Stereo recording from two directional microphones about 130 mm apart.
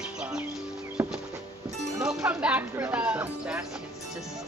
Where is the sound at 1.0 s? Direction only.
15° right (ahead or behind).